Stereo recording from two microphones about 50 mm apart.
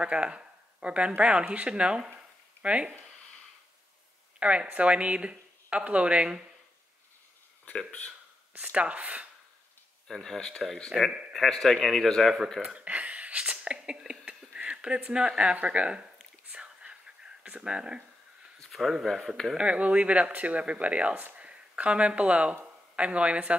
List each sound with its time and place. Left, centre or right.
0.0 s speech: right
2.1 s a sound: right
4.4 s speech: right
8.5 s speech: right
10.0 s speech: centre
12.7 s a sound: right
15.5 s speech: right
17.4 s speech: centre
18.6 s a sound: centre
19.5 s speech: right